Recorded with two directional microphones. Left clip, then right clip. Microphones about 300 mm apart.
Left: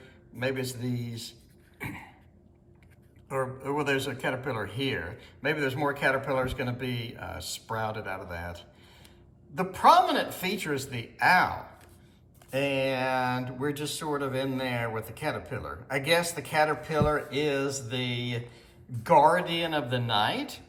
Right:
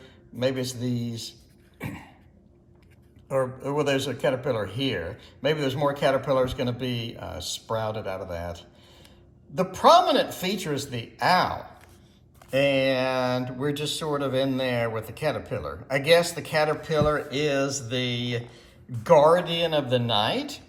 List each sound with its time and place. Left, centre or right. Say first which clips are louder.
0.0 s a man's voice: right 5 dB; centre
3.2 s speech: right 5 dB; centre
12.5 s speech: right 6 dB; centre